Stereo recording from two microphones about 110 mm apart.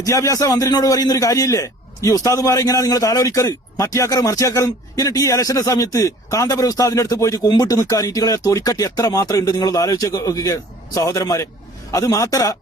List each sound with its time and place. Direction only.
0.0 s a man's voice: 30° left (ahead or behind)